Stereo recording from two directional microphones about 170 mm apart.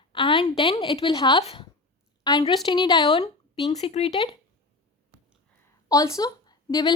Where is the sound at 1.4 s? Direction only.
40° left (ahead or behind).